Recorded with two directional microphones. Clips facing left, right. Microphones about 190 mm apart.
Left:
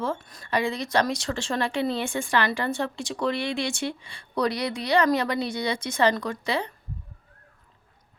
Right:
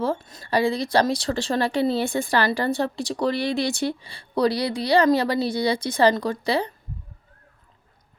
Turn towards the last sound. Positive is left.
turn(degrees=-35)  # may be behind; listen again after turning